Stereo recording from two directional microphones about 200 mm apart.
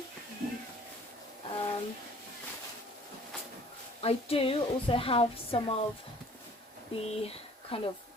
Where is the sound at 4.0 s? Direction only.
30° left (ahead or behind).